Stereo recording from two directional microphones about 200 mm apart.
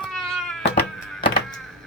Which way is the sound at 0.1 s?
Centre (ahead or behind).